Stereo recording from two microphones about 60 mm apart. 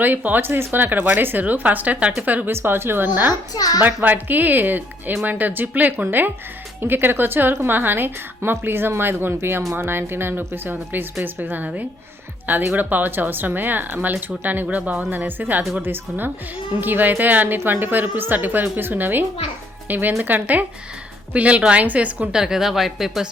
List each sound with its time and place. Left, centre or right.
0.0 s speech: right
2.5 s a woman's voice: right
3.5 s a child's voice: left
3.8 s a woman's voice: right
22.3 s speech: centre